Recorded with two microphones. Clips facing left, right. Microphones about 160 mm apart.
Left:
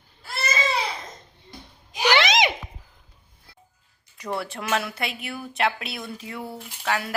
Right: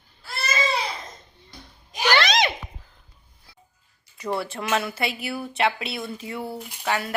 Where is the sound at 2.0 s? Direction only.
20° left (ahead or behind).